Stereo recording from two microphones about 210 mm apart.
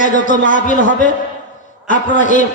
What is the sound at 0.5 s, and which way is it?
Speech, 35° left (ahead or behind).